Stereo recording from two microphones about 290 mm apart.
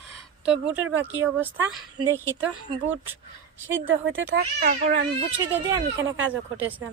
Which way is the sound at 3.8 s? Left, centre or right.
Right.